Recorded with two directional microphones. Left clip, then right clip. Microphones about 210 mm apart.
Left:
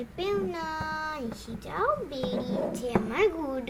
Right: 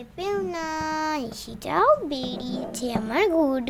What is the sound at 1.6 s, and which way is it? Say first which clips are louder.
A child's voice: right 9 dB; 50° right (ahead or behind).